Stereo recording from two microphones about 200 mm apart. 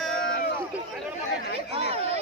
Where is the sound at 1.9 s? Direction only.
30° right (ahead or behind).